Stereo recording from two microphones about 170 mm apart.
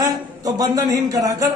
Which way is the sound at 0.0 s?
20° right (ahead or behind).